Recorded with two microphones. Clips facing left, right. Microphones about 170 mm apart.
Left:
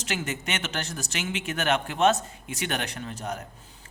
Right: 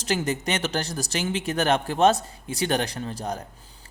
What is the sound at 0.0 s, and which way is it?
Speech, 35° right (ahead or behind).